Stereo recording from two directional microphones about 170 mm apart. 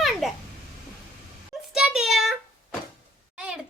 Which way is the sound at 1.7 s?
Centre (ahead or behind).